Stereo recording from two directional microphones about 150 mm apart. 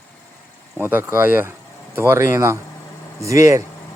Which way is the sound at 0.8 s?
15° right (ahead or behind).